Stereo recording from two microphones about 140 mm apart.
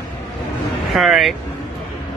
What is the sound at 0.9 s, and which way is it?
Speech, centre (ahead or behind).